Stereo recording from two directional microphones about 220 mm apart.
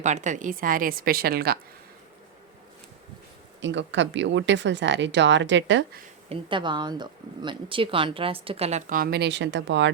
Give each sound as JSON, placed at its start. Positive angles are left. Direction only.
{"t": 0.0, "sound": "a woman's voice", "side_deg": -35}
{"t": 3.6, "sound": "speech", "side_deg": -55}
{"t": 6.2, "sound": "speech", "side_deg": -25}